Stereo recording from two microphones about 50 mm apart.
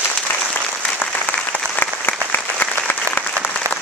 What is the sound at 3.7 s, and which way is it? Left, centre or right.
Applause, right.